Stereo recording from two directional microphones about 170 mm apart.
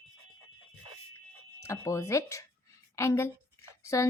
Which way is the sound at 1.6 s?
15° left (ahead or behind).